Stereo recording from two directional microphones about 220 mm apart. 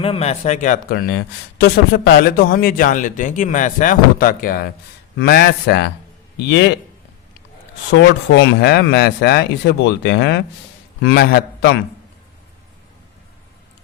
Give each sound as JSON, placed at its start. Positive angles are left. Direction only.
{"t": 0.0, "sound": "a man's voice", "side_deg": 25}
{"t": 7.9, "sound": "speech", "side_deg": 55}